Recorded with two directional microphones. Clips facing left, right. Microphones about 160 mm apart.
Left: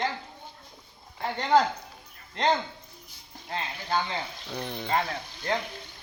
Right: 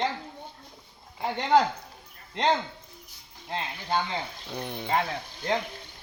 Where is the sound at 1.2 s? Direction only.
15° right (ahead or behind).